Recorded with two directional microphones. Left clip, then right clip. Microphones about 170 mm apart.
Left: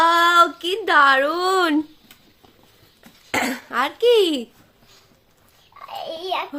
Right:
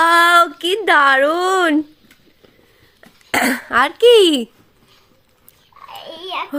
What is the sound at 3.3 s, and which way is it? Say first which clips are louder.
A child's voice: right 7 dB; 55° right (ahead or behind).